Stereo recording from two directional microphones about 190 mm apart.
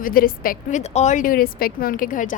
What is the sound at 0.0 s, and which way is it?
A woman's voice, 50° left (ahead or behind).